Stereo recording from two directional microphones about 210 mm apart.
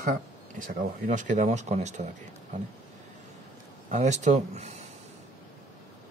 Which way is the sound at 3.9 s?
35° right (ahead or behind).